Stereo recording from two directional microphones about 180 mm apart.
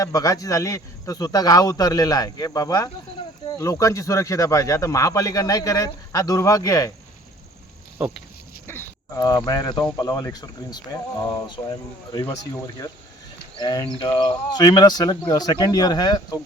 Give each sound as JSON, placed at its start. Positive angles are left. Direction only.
{"t": 0.0, "sound": "speech", "side_deg": 20}
{"t": 8.6, "sound": "speech", "side_deg": 15}
{"t": 13.6, "sound": "speech", "side_deg": 20}